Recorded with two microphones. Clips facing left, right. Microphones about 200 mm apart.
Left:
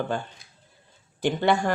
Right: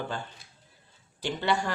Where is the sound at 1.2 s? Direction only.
55° left (ahead or behind).